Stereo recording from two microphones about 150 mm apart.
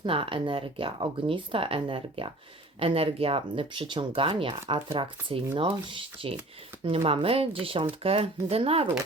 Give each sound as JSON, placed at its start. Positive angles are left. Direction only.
{"t": 0.0, "sound": "speech", "side_deg": -35}